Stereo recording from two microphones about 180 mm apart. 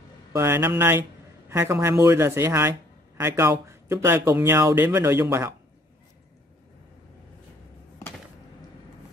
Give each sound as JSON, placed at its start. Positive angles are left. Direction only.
{"t": 0.3, "sound": "speech", "side_deg": -15}